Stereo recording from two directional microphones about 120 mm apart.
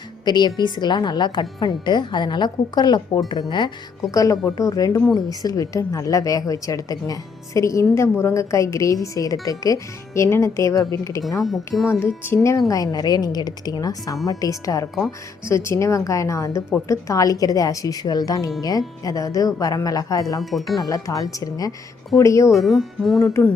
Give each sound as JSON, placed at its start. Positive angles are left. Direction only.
{"t": 0.3, "sound": "a woman's voice", "side_deg": 35}
{"t": 11.4, "sound": "speech", "side_deg": 0}
{"t": 11.9, "sound": "a woman's voice", "side_deg": 20}
{"t": 20.4, "sound": "speech", "side_deg": 0}
{"t": 20.8, "sound": "a woman's voice", "side_deg": 30}
{"t": 22.5, "sound": "speech", "side_deg": 0}